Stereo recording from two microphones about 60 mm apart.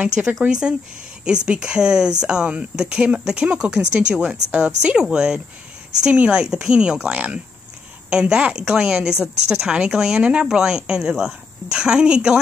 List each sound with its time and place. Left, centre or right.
0.0 s speech: centre